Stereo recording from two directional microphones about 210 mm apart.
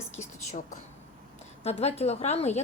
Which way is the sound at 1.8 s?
30° left (ahead or behind).